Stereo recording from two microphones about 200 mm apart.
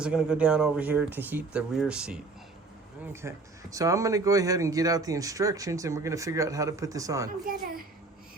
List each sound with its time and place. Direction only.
0.0 s speech: 5° right (ahead or behind)
7.4 s a woman's voice: 45° right (ahead or behind)